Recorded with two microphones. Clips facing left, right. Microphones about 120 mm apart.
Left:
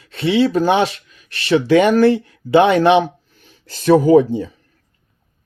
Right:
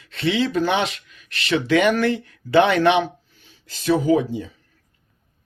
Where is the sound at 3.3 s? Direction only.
45° left (ahead or behind).